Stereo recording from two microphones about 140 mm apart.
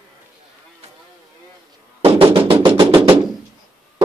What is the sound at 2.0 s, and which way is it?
Music, 40° right (ahead or behind).